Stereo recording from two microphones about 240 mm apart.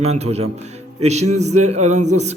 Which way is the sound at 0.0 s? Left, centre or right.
Right.